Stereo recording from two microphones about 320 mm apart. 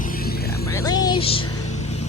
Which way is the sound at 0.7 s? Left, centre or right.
Centre.